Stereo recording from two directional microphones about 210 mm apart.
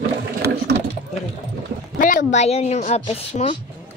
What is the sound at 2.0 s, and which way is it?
A woman's voice, 40° left (ahead or behind).